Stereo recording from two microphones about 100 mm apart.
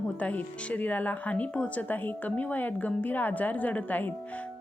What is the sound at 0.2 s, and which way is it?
A woman's voice, 15° left (ahead or behind).